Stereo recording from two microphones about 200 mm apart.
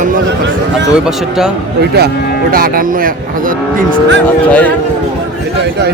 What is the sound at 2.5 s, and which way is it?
Speech, 45° right (ahead or behind).